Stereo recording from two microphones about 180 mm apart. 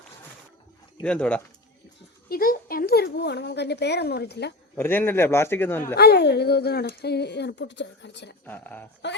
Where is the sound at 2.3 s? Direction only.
55° left (ahead or behind).